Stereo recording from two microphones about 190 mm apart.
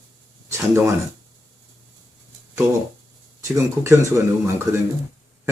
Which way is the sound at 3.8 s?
15° right (ahead or behind).